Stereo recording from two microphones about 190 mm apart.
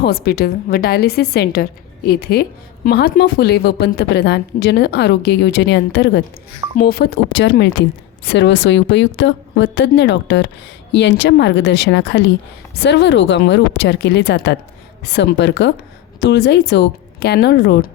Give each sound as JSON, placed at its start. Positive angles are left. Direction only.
{"t": 0.0, "sound": "a woman's voice", "side_deg": 55}